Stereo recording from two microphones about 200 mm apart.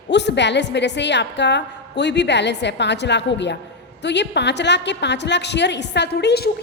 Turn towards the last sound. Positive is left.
turn(degrees=55)  # may be behind; listen again after turning